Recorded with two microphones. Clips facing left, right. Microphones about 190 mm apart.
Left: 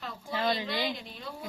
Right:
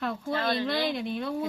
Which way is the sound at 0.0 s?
60° right (ahead or behind).